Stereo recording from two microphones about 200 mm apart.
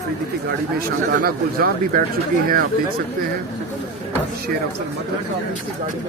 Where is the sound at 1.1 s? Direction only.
50° right (ahead or behind).